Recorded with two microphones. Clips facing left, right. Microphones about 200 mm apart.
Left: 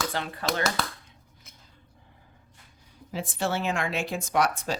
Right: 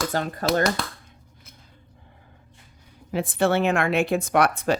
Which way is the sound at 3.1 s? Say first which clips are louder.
Right 8 dB; 60° right (ahead or behind).